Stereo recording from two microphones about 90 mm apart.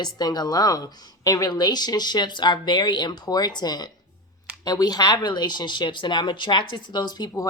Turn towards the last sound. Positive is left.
turn(degrees=50)  # may be behind; listen again after turning